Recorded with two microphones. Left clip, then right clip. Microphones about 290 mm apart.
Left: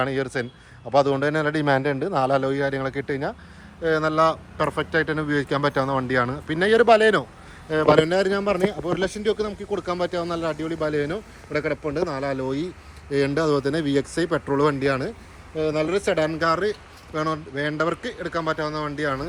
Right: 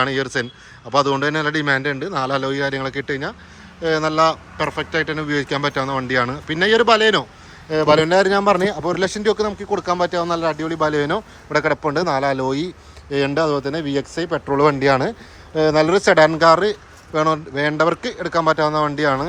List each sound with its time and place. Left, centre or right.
0.0 s a man's voice: centre